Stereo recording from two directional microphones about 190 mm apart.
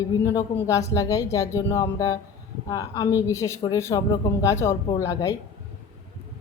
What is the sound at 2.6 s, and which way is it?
Speech, 20° left (ahead or behind).